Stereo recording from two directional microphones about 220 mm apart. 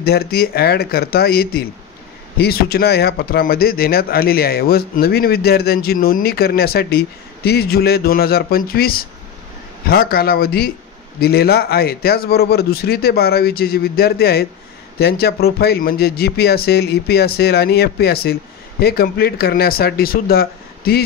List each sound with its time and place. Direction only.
0.0 s speech: 45° left (ahead or behind)